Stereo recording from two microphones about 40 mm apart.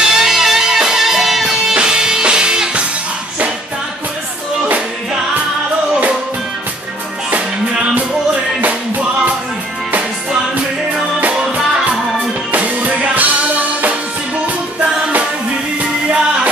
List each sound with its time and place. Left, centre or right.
0.0 s music: centre
12.5 s music: right